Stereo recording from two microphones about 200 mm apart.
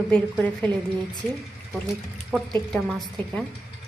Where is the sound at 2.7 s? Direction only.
Centre (ahead or behind).